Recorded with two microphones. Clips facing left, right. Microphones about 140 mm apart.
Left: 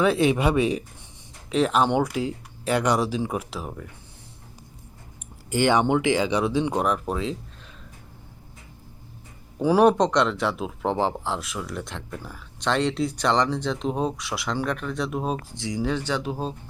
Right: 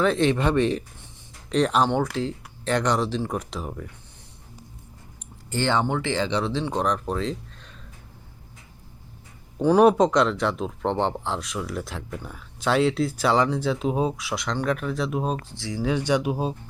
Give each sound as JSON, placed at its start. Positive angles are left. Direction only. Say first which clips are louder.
{"t": 0.0, "sound": "speech", "louder": "left 1 dB", "side_deg": 10}
{"t": 5.5, "sound": "speech", "louder": "left 3 dB", "side_deg": 15}
{"t": 9.6, "sound": "speech", "louder": "right 1 dB", "side_deg": 5}
{"t": 15.5, "sound": "speech", "louder": "left 2 dB", "side_deg": 20}
{"t": 16.0, "sound": "speech", "louder": "right 4 dB", "side_deg": -15}